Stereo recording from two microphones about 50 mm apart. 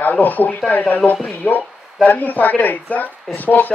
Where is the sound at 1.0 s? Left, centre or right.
Centre.